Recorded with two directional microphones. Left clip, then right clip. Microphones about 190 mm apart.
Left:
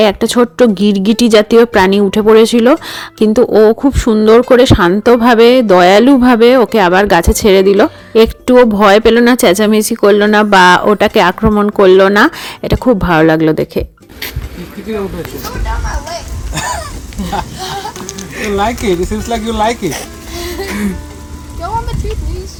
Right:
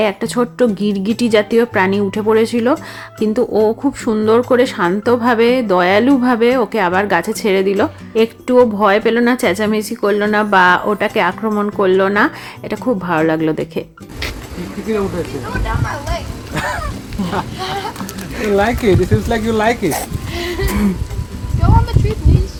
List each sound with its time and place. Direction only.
0.0 s speech: 40° left (ahead or behind)
17.6 s speech: centre (ahead or behind)
18.8 s speech: 55° left (ahead or behind)
20.3 s a sound: 5° right (ahead or behind)